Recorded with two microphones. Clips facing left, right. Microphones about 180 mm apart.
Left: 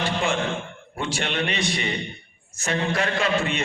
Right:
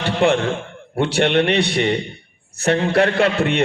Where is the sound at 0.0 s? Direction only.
65° right (ahead or behind).